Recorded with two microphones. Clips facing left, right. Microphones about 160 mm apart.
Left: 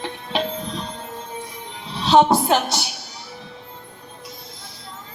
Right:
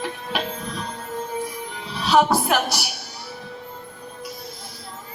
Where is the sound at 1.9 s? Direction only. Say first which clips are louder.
Left 3 dB; 25° left (ahead or behind).